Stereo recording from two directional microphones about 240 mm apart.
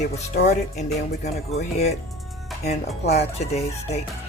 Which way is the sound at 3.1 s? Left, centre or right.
Left.